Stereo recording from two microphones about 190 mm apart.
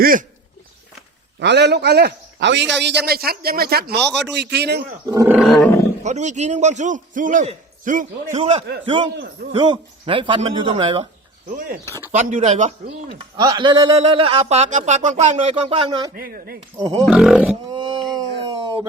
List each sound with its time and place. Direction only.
0.0 s speech: 45° right (ahead or behind)
1.4 s a man's voice: 65° right (ahead or behind)
5.0 s roaring cats: 15° right (ahead or behind)
5.4 s livestock: centre (ahead or behind)
6.0 s a man's voice: 40° right (ahead or behind)
8.8 s a man's voice: 25° right (ahead or behind)
12.1 s a man's voice: 40° right (ahead or behind)
13.3 s a man's voice: 25° right (ahead or behind)
16.1 s speech: 50° right (ahead or behind)
17.1 s livestock: 5° right (ahead or behind)
17.7 s a sound: 25° right (ahead or behind)